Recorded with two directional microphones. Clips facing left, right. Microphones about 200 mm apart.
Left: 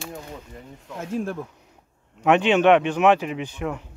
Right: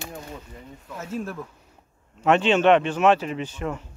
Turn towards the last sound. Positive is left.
turn(degrees=15)  # may be behind; listen again after turning